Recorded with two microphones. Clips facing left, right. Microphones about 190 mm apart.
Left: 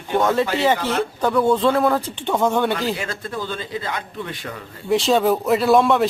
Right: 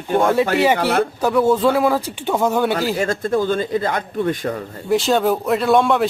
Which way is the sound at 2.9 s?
45° right (ahead or behind).